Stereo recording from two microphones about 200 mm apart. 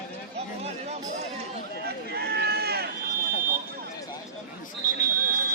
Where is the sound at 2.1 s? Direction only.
55° right (ahead or behind).